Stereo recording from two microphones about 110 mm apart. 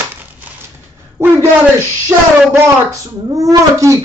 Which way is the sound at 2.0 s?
25° right (ahead or behind).